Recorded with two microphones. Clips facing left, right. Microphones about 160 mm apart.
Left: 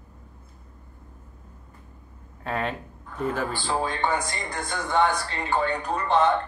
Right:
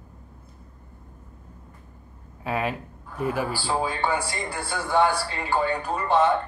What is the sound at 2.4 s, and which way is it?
A man's voice, 5° right (ahead or behind).